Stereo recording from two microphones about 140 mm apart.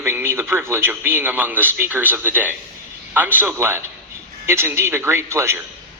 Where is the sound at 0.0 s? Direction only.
15° right (ahead or behind).